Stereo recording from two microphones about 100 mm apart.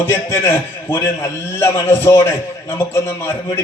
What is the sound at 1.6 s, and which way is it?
A man's voice, 25° left (ahead or behind).